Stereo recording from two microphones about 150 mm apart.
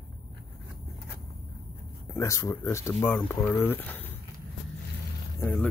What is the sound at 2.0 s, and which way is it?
Speech, 20° left (ahead or behind).